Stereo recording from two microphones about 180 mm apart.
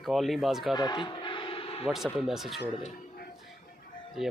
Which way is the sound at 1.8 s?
Centre (ahead or behind).